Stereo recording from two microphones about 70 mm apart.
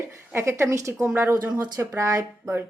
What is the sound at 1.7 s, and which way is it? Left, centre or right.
Speech, right.